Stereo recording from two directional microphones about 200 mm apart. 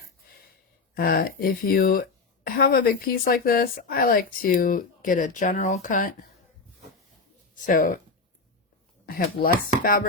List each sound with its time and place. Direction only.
0.9 s speech: 50° left (ahead or behind)
7.5 s speech: 40° left (ahead or behind)
9.0 s speech: 50° left (ahead or behind)